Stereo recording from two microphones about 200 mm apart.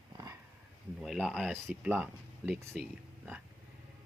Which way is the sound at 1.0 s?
Centre (ahead or behind).